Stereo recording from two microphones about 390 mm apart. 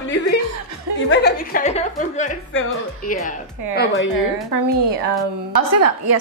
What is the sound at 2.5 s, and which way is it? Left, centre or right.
A woman's voice, left.